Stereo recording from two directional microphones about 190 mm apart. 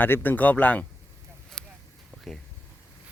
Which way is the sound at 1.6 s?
5° left (ahead or behind).